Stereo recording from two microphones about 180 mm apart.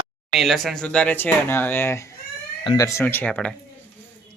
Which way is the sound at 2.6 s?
25° left (ahead or behind).